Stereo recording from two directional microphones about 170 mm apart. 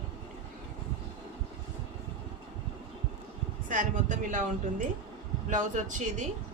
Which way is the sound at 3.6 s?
50° right (ahead or behind).